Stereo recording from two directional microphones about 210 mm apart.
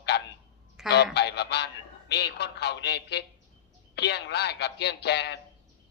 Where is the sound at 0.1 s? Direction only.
50° left (ahead or behind).